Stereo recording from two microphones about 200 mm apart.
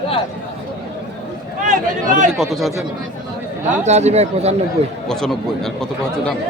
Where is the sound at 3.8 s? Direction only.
35° right (ahead or behind).